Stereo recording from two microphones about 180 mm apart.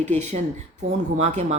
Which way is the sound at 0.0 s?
40° right (ahead or behind).